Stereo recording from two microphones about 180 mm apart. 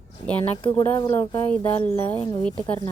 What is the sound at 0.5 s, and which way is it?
Speech, 25° left (ahead or behind).